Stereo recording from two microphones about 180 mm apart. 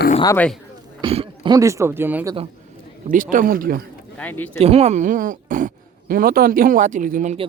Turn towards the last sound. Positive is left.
turn(degrees=-40)  # may be behind; listen again after turning